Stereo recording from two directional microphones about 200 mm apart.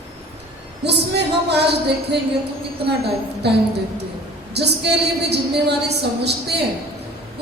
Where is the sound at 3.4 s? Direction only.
55° right (ahead or behind).